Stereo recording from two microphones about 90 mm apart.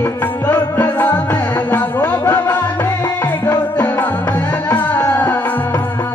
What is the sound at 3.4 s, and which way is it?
Music, 20° left (ahead or behind).